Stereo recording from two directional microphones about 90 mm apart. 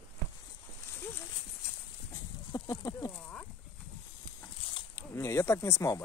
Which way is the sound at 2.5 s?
50° left (ahead or behind).